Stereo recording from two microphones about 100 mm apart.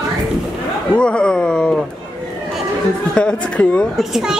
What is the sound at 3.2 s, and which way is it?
Speech, 10° left (ahead or behind).